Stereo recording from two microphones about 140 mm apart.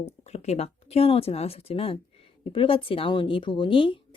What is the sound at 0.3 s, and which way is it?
Speech, 50° left (ahead or behind).